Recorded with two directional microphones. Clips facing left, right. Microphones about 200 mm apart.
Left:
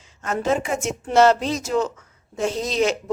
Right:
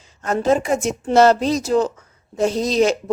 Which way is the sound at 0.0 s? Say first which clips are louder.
Right 4 dB; 35° right (ahead or behind).